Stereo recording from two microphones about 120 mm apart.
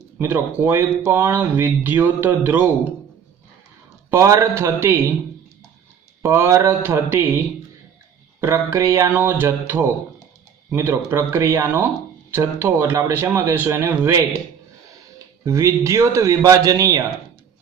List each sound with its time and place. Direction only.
0.2 s speech: 20° right (ahead or behind)
4.1 s speech: 20° right (ahead or behind)
6.2 s speech: 20° right (ahead or behind)
8.4 s speech: 20° right (ahead or behind)
15.4 s speech: 25° right (ahead or behind)